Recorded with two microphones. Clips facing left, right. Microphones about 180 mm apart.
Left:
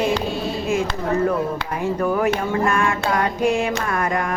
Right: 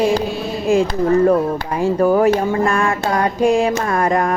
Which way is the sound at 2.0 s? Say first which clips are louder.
Right 7 dB; 35° right (ahead or behind).